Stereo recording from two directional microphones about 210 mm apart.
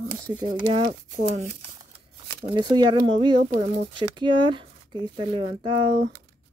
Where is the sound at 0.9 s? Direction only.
40° right (ahead or behind).